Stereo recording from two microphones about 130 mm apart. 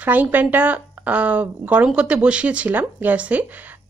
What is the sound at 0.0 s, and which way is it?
Speech, 15° right (ahead or behind).